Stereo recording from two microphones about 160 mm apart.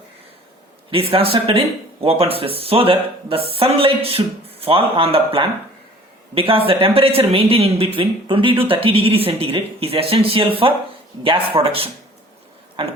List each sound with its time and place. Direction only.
0.9 s speech: 35° right (ahead or behind)